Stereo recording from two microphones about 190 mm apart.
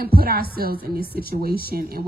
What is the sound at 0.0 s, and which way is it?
A woman's voice, 50° right (ahead or behind).